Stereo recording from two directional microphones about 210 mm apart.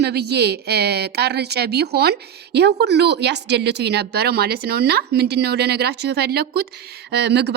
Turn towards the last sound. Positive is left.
turn(degrees=-55)  # may be behind; listen again after turning